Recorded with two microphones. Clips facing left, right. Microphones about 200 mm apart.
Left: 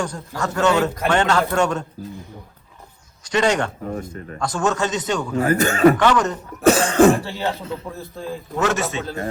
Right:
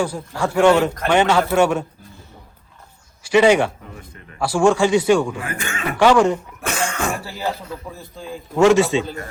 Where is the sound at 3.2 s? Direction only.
10° right (ahead or behind).